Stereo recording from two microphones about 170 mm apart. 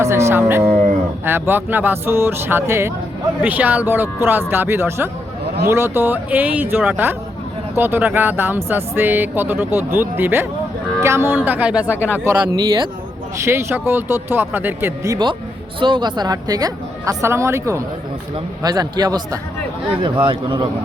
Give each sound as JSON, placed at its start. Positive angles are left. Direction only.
{"t": 0.0, "sound": "speech", "side_deg": -15}
{"t": 0.6, "sound": "livestock", "side_deg": -45}
{"t": 1.2, "sound": "speech", "side_deg": -10}
{"t": 11.9, "sound": "speech", "side_deg": 10}
{"t": 12.2, "sound": "a woman's voice", "side_deg": -15}